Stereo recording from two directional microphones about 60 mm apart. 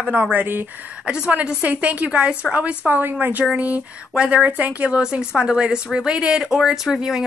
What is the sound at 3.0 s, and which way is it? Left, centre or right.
A woman's voice, right.